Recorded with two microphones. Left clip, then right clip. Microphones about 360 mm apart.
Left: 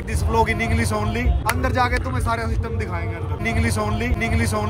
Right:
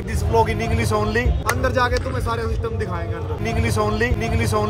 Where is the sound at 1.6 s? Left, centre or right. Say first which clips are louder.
Right 2 dB; left.